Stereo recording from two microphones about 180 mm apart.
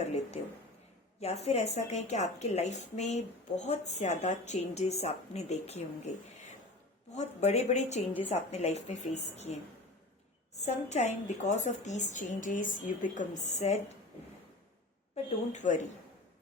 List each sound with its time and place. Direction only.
0.0 s a sound: 40° left (ahead or behind)
1.2 s a woman's voice: 35° left (ahead or behind)
7.1 s a woman's voice: 40° left (ahead or behind)
10.6 s a woman's voice: 40° left (ahead or behind)
15.1 s a woman's voice: 40° left (ahead or behind)